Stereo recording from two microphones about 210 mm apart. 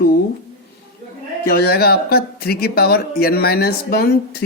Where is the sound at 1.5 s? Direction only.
50° left (ahead or behind).